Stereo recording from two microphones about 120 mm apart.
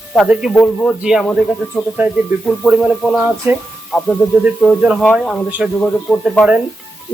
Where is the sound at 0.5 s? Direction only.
15° left (ahead or behind).